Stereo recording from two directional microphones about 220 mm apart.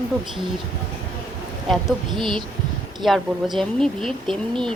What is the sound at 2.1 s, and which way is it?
Speech, 20° right (ahead or behind).